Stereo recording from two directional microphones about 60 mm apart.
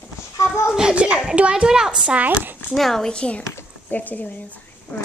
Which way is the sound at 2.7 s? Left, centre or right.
Centre.